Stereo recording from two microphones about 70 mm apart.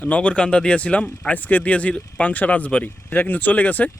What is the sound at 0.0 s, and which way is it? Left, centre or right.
Speech, centre.